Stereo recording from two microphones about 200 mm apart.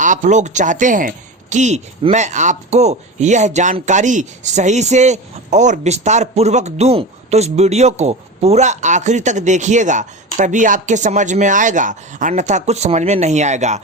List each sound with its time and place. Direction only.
0.0 s speech: 40° right (ahead or behind)